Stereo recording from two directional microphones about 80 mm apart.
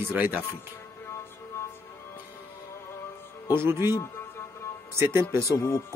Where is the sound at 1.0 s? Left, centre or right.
Left.